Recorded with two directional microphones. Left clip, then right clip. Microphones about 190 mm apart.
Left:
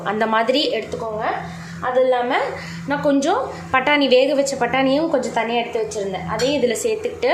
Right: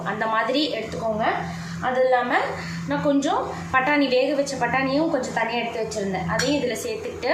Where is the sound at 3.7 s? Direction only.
50° left (ahead or behind).